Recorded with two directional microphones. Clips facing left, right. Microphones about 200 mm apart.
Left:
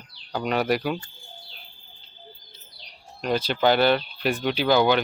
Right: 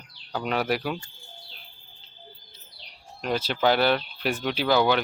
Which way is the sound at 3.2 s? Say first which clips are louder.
Left 2 dB; 5° right (ahead or behind).